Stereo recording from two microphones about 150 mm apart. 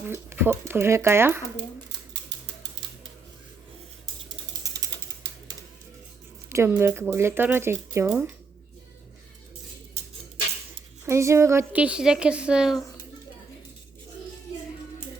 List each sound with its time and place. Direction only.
0.1 s a woman's voice: 15° right (ahead or behind)
6.5 s a woman's voice: 15° right (ahead or behind)
11.0 s a woman's voice: 20° right (ahead or behind)